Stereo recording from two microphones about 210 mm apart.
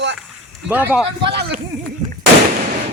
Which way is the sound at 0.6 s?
10° right (ahead or behind).